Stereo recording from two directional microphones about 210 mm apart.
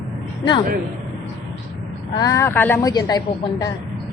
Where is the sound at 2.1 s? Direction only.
15° left (ahead or behind).